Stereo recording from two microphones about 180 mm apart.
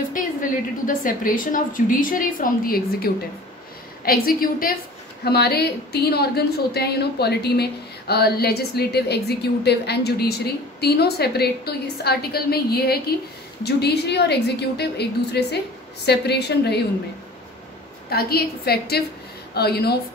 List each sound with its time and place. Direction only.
0.1 s a woman's voice: 50° left (ahead or behind); by 16.8 s 65° left (ahead or behind)
18.1 s a woman's voice: 60° left (ahead or behind)